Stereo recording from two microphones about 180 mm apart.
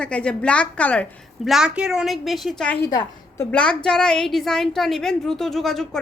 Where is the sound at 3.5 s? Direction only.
5° left (ahead or behind).